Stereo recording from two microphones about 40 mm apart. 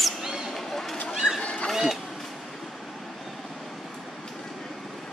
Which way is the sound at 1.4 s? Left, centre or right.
Left.